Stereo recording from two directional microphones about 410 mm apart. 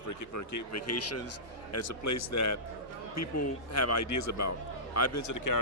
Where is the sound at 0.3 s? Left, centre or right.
Left.